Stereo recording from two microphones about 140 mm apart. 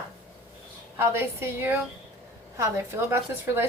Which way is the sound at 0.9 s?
20° right (ahead or behind).